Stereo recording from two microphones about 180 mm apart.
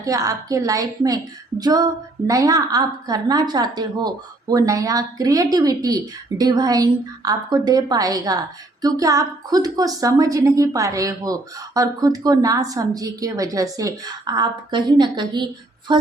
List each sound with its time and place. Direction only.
0.0 s a woman's voice: 20° right (ahead or behind)